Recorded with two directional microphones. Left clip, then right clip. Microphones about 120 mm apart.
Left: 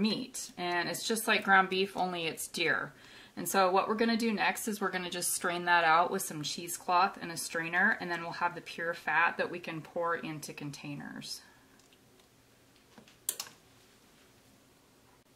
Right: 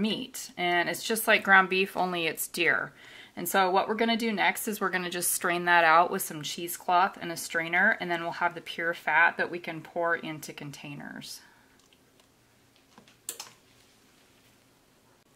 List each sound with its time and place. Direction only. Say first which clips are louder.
0.1 s a woman's voice: right 3 dB; 25° right (ahead or behind)
3.5 s a woman's voice: right 3 dB; 15° right (ahead or behind)